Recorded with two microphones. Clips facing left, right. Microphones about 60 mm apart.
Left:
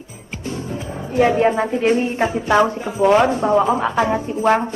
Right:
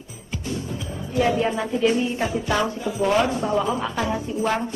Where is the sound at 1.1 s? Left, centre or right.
Left.